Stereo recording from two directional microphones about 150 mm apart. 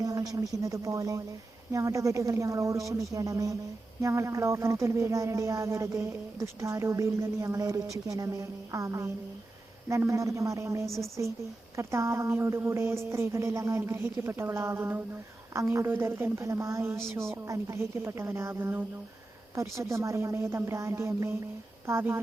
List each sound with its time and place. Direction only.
0.0 s speech: 25° right (ahead or behind)